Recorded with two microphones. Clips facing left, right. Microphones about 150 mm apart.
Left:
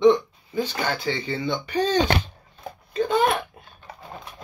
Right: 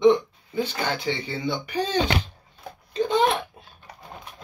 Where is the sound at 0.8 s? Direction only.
15° right (ahead or behind).